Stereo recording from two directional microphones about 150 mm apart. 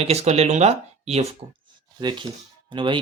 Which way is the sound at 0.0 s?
45° right (ahead or behind).